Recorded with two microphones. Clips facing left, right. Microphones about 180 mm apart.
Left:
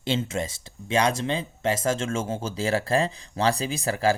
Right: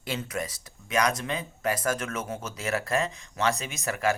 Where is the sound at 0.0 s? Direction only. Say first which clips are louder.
Left 5 dB; 25° left (ahead or behind).